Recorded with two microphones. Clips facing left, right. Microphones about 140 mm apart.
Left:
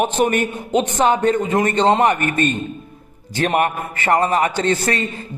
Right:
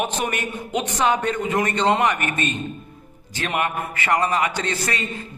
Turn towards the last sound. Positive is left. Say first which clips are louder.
# left 7 dB
turn(degrees=35)  # may be behind; listen again after turning